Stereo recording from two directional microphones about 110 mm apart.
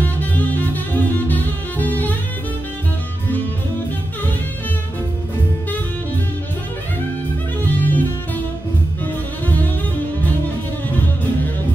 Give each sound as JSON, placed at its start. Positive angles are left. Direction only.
{"t": 0.0, "sound": "music", "side_deg": 15}
{"t": 7.6, "sound": "music", "side_deg": 15}